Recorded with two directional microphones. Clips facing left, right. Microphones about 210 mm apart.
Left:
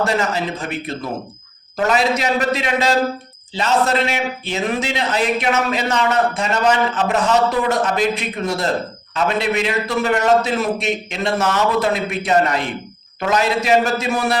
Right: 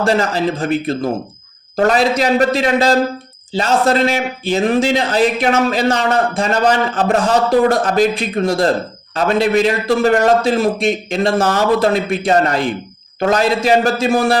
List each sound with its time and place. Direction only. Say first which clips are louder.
0.0 s speech: right 4 dB; 30° right (ahead or behind)